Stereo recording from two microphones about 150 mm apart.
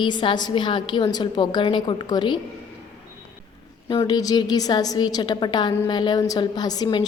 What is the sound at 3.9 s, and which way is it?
A woman's voice, 25° left (ahead or behind).